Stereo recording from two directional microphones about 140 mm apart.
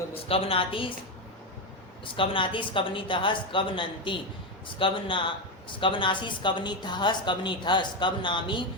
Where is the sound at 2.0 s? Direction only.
40° left (ahead or behind).